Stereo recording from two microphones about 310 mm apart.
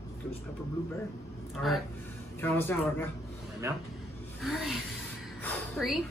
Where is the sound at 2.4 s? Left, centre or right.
Centre.